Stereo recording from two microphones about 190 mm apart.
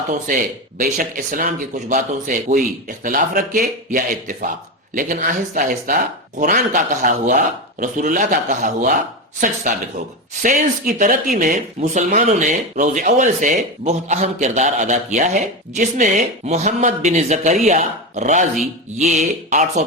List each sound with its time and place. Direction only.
0.8 s speech: 45° right (ahead or behind)
10.4 s speech: 40° right (ahead or behind)